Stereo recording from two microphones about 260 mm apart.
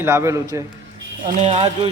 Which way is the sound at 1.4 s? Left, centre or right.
Right.